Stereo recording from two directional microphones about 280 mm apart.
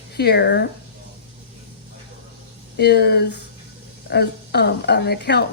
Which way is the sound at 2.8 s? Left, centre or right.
Left.